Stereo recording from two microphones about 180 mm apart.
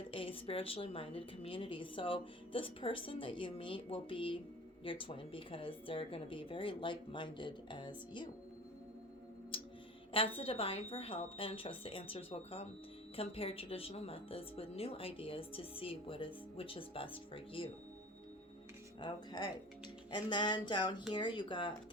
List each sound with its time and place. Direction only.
0.1 s a woman's voice: 30° left (ahead or behind)
9.5 s music: 30° left (ahead or behind)
10.1 s speech: 30° left (ahead or behind)
18.9 s a woman's voice: 25° left (ahead or behind)